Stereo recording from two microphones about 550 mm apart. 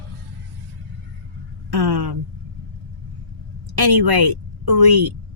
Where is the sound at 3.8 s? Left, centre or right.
Right.